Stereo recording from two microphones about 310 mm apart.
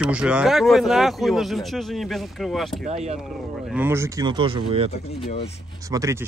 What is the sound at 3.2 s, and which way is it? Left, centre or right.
Speech, centre.